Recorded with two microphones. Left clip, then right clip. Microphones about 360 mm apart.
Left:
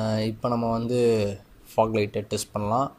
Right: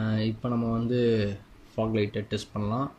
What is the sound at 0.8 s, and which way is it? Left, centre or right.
Speech, centre.